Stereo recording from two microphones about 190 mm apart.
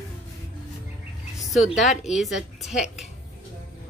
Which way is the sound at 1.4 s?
Centre (ahead or behind).